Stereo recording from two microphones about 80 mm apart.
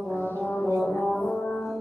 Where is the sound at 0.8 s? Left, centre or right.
Centre.